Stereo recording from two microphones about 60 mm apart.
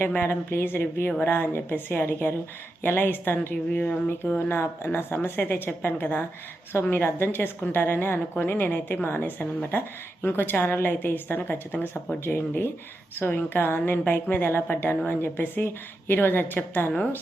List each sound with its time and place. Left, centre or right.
0.3 s a woman's voice: left
4.4 s a woman's voice: left